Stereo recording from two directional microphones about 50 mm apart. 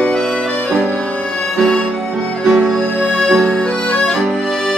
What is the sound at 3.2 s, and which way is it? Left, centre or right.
Accordion, centre.